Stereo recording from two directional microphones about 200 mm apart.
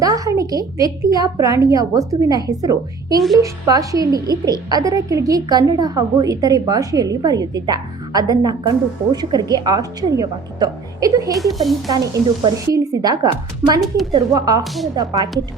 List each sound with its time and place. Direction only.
0.0 s a woman's voice: 15° right (ahead or behind)
11.3 s speech: centre (ahead or behind)
11.9 s a woman's voice: 20° right (ahead or behind)
13.8 s speech: centre (ahead or behind)
14.1 s a woman's voice: 20° right (ahead or behind)